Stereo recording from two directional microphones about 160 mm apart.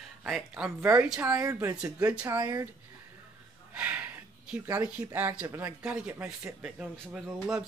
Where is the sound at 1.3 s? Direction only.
15° right (ahead or behind).